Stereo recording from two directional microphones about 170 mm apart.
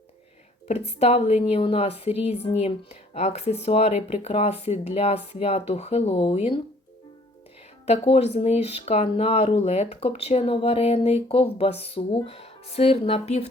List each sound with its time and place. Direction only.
0.7 s a woman's voice: 40° left (ahead or behind)
7.9 s a woman's voice: 40° left (ahead or behind)